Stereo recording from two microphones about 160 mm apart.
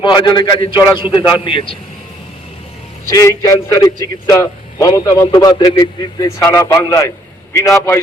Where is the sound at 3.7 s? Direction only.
20° left (ahead or behind).